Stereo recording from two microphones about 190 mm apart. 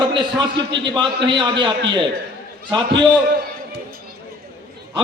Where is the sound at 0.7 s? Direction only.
25° right (ahead or behind).